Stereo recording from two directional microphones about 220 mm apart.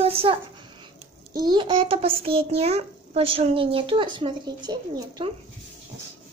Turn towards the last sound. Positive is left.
turn(degrees=-20)  # may be behind; listen again after turning